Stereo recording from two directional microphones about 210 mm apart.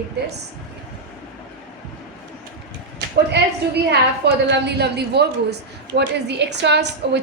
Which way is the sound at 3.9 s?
55° right (ahead or behind).